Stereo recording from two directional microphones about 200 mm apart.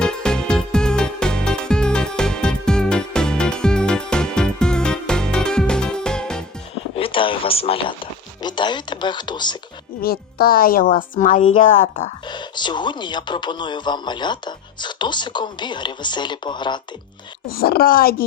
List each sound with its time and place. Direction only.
0.0 s music: 5° left (ahead or behind)
6.9 s a sound: 25° left (ahead or behind)
10.0 s a child's voice: 50° left (ahead or behind)
12.3 s speech: 20° left (ahead or behind)
17.5 s a child's voice: 50° left (ahead or behind)